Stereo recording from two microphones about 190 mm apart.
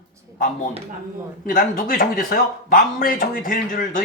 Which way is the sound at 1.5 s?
45° left (ahead or behind).